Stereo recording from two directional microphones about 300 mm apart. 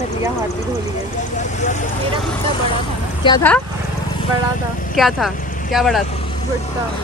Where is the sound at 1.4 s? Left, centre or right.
Left.